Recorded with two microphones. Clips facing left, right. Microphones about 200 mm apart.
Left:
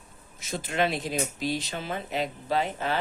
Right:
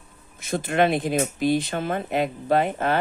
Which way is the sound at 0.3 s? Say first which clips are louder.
Right 6 dB; 55° right (ahead or behind).